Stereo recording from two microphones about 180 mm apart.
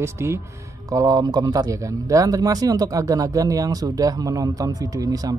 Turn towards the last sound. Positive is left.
turn(degrees=-20)  # may be behind; listen again after turning